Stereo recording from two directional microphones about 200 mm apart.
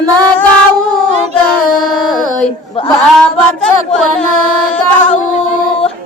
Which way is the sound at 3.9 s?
5° left (ahead or behind).